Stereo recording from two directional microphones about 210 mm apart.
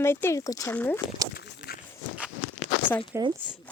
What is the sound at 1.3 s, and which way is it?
Walk, 50° left (ahead or behind).